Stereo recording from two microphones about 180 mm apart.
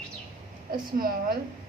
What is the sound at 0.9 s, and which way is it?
Speech, 55° right (ahead or behind).